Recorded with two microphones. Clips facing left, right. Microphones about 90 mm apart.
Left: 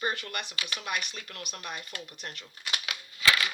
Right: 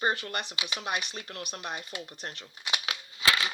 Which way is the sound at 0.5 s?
20° right (ahead or behind).